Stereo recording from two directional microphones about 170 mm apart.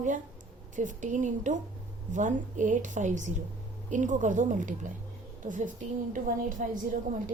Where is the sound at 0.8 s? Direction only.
45° right (ahead or behind).